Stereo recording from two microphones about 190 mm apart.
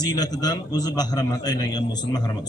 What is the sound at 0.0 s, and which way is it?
A man's voice, 20° left (ahead or behind).